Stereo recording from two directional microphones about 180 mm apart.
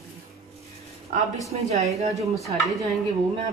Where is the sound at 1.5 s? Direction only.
40° right (ahead or behind).